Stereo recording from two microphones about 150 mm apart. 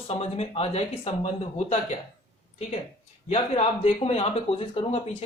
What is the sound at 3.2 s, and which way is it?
A man's voice, 45° left (ahead or behind).